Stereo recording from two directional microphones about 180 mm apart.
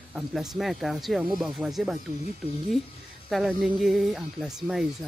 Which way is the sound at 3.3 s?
Centre (ahead or behind).